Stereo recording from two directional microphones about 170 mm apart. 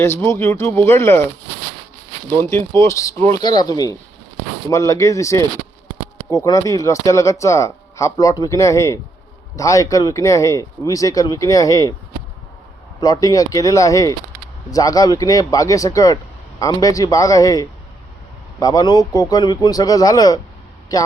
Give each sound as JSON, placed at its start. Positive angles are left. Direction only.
{"t": 0.0, "sound": "speech", "side_deg": 15}
{"t": 2.4, "sound": "speech", "side_deg": 15}
{"t": 13.0, "sound": "speech", "side_deg": 20}